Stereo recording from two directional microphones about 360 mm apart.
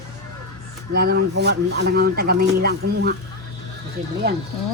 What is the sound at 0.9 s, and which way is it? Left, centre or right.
Speech, right.